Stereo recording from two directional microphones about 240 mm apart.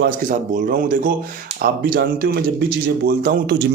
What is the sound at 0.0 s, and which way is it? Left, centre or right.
A man's voice, right.